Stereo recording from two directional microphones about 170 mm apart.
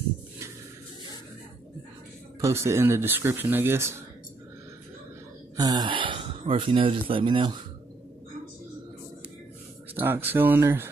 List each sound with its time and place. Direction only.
2.4 s speech: 15° right (ahead or behind)
5.6 s speech: 25° right (ahead or behind)
9.9 s speech: 10° right (ahead or behind)